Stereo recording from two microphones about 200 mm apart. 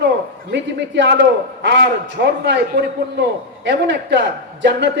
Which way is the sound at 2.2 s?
60° right (ahead or behind).